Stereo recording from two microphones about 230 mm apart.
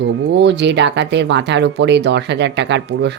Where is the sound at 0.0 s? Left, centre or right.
Right.